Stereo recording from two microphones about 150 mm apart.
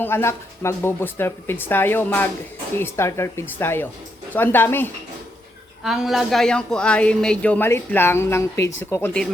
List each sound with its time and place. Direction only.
0.0 s speech: 15° left (ahead or behind)
5.8 s speech: centre (ahead or behind); by 9.2 s 15° left (ahead or behind)